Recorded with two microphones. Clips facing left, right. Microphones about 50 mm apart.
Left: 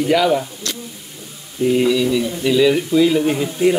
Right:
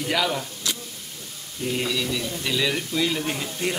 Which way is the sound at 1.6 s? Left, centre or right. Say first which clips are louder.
Left 11 dB; centre.